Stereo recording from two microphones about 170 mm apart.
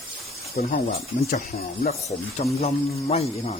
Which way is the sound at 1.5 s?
40° left (ahead or behind).